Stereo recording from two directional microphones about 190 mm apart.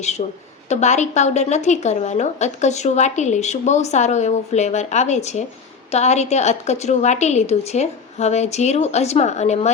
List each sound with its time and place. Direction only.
0.2 s a woman's voice: 35° left (ahead or behind)